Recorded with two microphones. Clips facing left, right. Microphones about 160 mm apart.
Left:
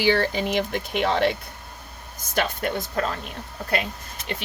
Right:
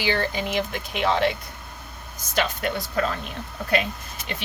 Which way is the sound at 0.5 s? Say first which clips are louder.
Left 2 dB; 55° left (ahead or behind).